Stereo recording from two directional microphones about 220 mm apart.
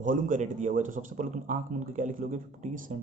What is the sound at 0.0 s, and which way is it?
Speech, 35° right (ahead or behind).